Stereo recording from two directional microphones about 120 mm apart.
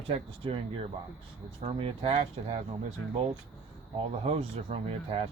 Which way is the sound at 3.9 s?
55° right (ahead or behind).